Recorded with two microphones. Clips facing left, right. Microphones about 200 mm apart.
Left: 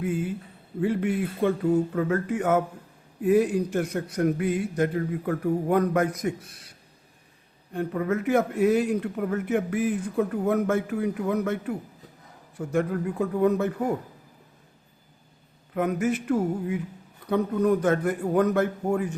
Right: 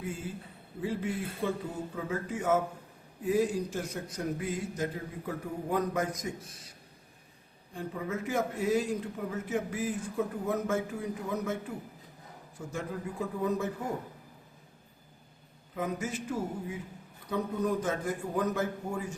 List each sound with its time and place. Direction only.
0.0 s a man's voice: 65° left (ahead or behind)
15.7 s a man's voice: 65° left (ahead or behind)